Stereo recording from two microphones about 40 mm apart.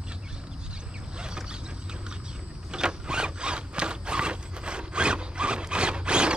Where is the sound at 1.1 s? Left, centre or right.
Right.